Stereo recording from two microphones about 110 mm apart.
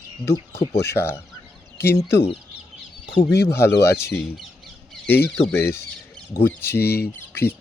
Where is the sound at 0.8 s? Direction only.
20° left (ahead or behind).